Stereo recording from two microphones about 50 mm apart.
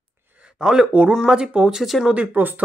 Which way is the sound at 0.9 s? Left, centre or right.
Right.